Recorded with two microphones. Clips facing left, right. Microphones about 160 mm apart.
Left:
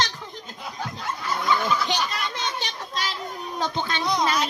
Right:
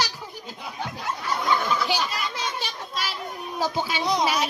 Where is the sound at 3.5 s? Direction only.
5° right (ahead or behind).